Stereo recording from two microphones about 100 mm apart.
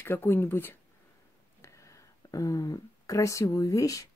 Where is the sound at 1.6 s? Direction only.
30° left (ahead or behind).